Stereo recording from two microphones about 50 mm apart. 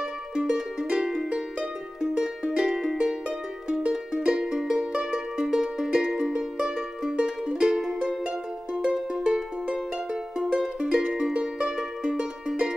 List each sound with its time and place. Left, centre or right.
0.4 s music: centre